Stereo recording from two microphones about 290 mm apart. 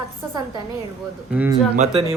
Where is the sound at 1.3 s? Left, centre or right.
Centre.